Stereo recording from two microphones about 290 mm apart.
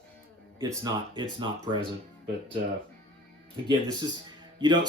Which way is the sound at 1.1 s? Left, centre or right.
Centre.